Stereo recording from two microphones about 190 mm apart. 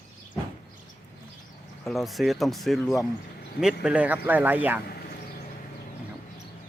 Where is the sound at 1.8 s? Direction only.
Centre (ahead or behind).